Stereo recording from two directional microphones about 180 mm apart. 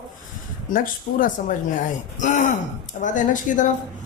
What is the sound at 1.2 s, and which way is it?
A woman's voice, 45° left (ahead or behind).